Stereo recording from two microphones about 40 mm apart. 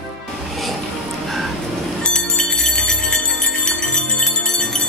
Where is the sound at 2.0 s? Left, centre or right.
Left.